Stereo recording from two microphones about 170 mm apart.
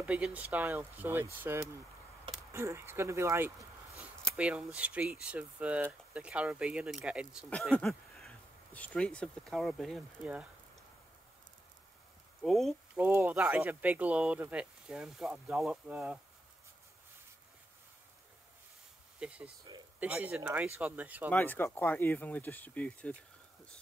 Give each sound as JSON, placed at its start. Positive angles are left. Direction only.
{"t": 0.0, "sound": "speech", "side_deg": -10}
{"t": 7.4, "sound": "speech", "side_deg": 5}
{"t": 12.4, "sound": "speech", "side_deg": 0}
{"t": 12.9, "sound": "speech", "side_deg": -10}
{"t": 19.1, "sound": "speech", "side_deg": -5}
{"t": 21.3, "sound": "speech", "side_deg": 10}